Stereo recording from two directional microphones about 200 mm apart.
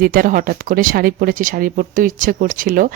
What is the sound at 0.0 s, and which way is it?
Speech, 45° right (ahead or behind).